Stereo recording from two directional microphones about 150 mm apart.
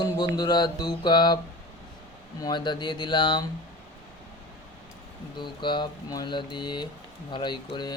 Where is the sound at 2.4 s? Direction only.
30° left (ahead or behind).